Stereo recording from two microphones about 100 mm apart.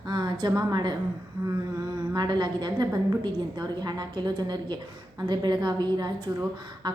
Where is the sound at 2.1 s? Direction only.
45° right (ahead or behind).